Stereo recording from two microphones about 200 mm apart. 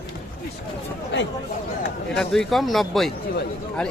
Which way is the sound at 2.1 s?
Centre (ahead or behind).